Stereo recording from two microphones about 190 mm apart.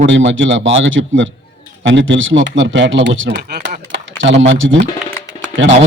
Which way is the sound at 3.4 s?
55° right (ahead or behind).